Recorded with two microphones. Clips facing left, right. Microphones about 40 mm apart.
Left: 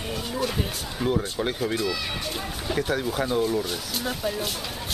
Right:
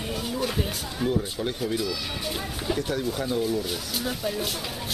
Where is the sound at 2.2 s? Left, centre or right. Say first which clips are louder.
Even; centre.